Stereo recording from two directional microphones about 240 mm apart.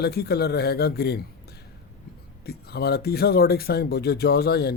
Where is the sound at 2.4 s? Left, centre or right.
Left.